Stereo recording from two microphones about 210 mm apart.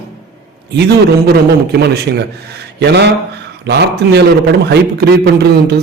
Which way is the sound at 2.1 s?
50° right (ahead or behind).